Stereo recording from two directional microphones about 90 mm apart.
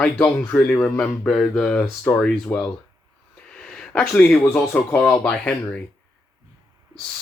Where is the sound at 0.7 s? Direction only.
15° left (ahead or behind).